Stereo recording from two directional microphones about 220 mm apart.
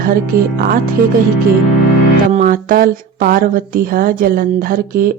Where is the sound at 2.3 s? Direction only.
35° right (ahead or behind).